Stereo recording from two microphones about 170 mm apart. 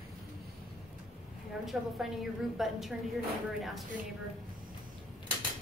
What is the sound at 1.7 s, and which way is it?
A woman's voice, centre (ahead or behind).